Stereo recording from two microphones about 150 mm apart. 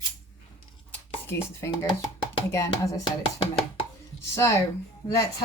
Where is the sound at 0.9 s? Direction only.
15° left (ahead or behind).